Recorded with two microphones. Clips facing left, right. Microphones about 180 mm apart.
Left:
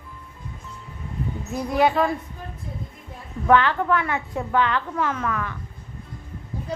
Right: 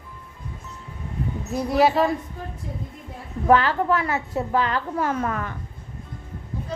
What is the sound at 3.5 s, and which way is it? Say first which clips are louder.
A woman's voice: even; 35° right (ahead or behind).